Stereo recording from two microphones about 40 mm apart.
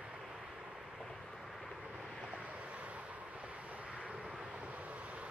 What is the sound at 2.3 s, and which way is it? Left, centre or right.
Vehicle, right.